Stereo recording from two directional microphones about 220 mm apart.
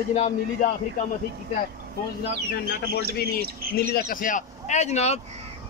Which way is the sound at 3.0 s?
45° right (ahead or behind).